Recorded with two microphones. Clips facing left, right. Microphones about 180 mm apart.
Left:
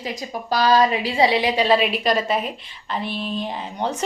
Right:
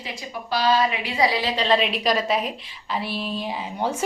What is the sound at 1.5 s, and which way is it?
A woman's voice, 5° left (ahead or behind).